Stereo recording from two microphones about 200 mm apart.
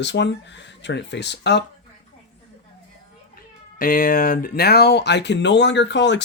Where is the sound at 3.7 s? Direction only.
45° left (ahead or behind).